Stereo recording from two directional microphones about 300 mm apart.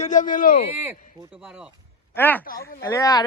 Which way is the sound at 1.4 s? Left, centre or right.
Centre.